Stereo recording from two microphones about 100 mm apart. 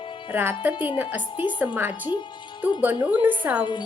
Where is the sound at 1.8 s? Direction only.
20° right (ahead or behind).